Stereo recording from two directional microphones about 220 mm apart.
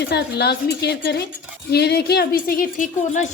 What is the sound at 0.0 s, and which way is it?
A woman's voice, 50° left (ahead or behind).